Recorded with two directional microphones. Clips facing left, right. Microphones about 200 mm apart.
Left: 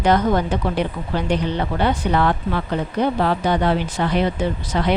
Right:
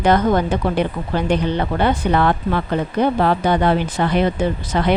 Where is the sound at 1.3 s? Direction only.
55° right (ahead or behind).